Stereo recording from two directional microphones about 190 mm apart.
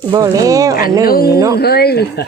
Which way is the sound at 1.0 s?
50° left (ahead or behind).